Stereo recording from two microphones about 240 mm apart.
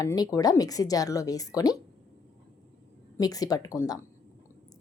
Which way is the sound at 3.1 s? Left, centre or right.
Centre.